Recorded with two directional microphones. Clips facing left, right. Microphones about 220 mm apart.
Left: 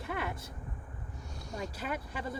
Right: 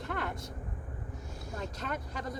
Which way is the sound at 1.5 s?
5° left (ahead or behind).